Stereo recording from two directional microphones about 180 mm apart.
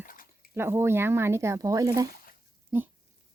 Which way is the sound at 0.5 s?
15° right (ahead or behind).